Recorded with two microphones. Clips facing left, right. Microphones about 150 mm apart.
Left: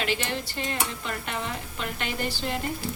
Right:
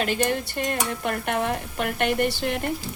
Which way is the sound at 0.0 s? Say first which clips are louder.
Right 5 dB; 45° right (ahead or behind).